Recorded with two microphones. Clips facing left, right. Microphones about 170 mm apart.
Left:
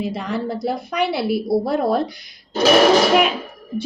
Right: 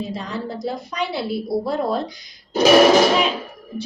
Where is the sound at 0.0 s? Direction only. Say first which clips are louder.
Left 4 dB; 60° left (ahead or behind).